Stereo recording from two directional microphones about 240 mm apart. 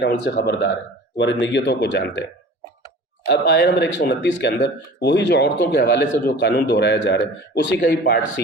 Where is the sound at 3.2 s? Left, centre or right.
Left.